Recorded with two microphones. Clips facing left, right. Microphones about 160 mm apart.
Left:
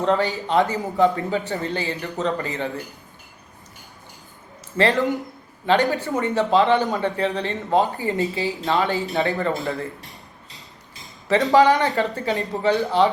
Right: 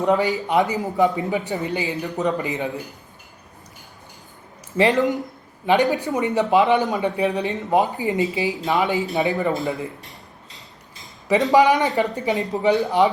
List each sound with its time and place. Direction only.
0.0 s speech: 15° right (ahead or behind)
4.8 s speech: 15° right (ahead or behind)
11.5 s speech: 15° right (ahead or behind)